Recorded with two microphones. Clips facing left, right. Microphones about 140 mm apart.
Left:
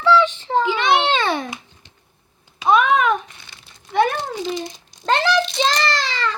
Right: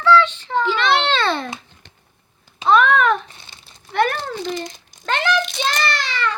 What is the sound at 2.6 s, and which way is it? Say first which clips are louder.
Babbling: right 1 dB; 10° left (ahead or behind).